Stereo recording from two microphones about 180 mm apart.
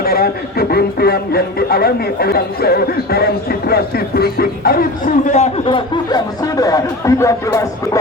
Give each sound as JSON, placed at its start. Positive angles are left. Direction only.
{"t": 0.0, "sound": "speech", "side_deg": 60}
{"t": 5.6, "sound": "speech", "side_deg": 25}